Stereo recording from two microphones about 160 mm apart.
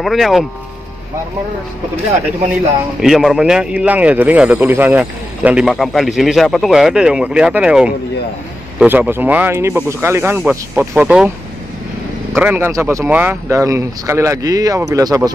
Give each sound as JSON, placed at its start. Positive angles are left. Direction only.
{"t": 0.0, "sound": "speech", "side_deg": 0}
{"t": 3.0, "sound": "speech", "side_deg": 0}
{"t": 12.4, "sound": "a man's voice", "side_deg": -15}